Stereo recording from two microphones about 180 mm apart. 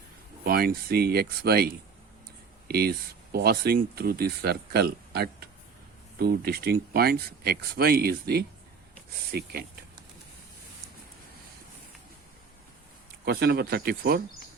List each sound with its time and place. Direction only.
0.4 s speech: 55° right (ahead or behind)
13.2 s speech: 60° right (ahead or behind)